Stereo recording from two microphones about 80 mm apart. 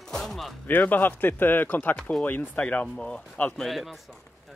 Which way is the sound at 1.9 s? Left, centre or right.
Centre.